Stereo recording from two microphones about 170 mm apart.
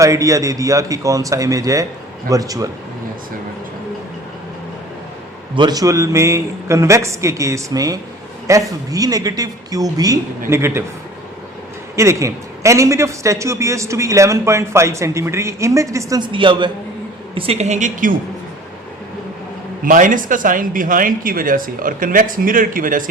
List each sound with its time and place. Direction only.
0.0 s a man's voice: 20° right (ahead or behind)
5.5 s a man's voice: 25° right (ahead or behind)
11.9 s a man's voice: 15° right (ahead or behind); by 18.1 s 45° right (ahead or behind)
19.8 s speech: 50° right (ahead or behind)